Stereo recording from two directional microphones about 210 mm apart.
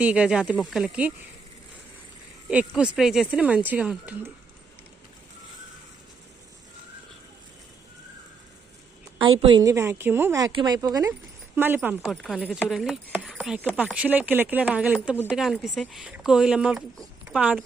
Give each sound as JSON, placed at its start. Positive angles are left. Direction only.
{"t": 0.0, "sound": "speech", "side_deg": -5}
{"t": 2.5, "sound": "speech", "side_deg": -5}
{"t": 9.4, "sound": "speech", "side_deg": -20}